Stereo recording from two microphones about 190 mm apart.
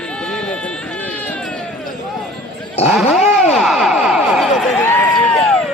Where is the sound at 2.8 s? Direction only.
30° left (ahead or behind).